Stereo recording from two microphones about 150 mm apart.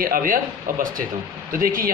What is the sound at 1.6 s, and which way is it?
Speech, 75° right (ahead or behind).